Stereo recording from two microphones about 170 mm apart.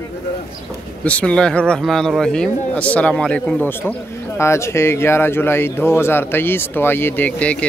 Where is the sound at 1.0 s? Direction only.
5° left (ahead or behind).